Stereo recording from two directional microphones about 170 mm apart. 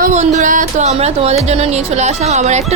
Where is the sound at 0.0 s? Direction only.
45° right (ahead or behind).